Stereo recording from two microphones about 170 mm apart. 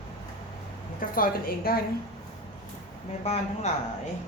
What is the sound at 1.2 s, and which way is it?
Speech, 60° left (ahead or behind).